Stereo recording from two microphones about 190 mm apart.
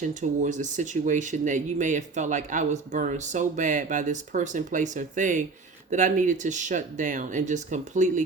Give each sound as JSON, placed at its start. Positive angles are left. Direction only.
{"t": 0.0, "sound": "speech", "side_deg": -40}